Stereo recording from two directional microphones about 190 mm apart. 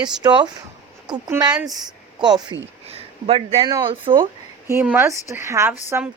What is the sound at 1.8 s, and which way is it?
Speech, 20° right (ahead or behind).